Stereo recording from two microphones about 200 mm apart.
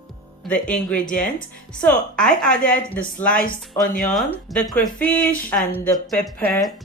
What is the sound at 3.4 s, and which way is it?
Speech, 45° left (ahead or behind).